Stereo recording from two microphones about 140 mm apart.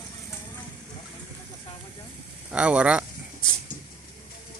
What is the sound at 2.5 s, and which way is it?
Speech, 10° right (ahead or behind).